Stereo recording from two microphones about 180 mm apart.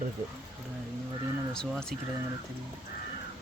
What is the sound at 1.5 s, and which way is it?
Speech, 5° left (ahead or behind).